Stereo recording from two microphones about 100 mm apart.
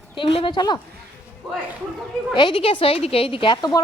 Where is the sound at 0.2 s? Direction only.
55° left (ahead or behind).